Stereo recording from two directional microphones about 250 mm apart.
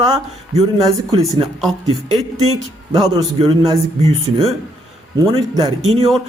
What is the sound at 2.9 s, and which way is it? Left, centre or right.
A man's voice, centre.